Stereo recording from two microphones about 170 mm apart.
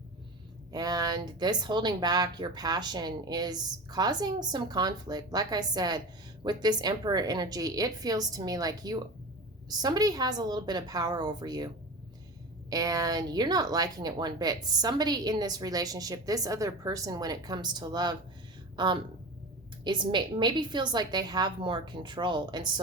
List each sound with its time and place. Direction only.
0.7 s speech: 20° right (ahead or behind)
12.7 s speech: 20° right (ahead or behind)
19.8 s speech: 25° right (ahead or behind)